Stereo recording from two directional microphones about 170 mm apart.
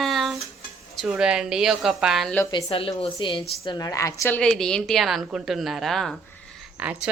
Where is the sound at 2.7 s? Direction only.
35° left (ahead or behind); by 4.3 s 20° left (ahead or behind).